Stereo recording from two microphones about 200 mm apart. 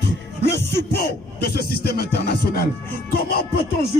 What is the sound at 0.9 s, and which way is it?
Music, 50° left (ahead or behind).